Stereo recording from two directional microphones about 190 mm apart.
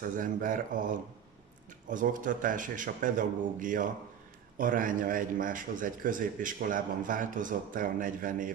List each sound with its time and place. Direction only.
0.0 s a man's voice: 45° right (ahead or behind)